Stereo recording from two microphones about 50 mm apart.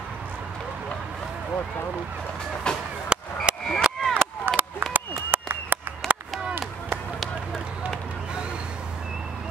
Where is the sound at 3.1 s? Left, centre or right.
Centre.